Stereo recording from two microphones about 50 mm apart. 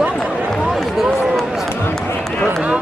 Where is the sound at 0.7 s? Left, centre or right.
Centre.